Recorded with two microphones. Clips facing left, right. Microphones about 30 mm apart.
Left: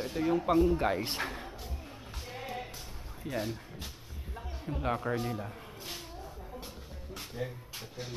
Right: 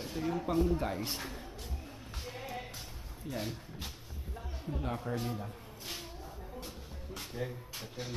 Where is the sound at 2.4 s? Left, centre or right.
Centre.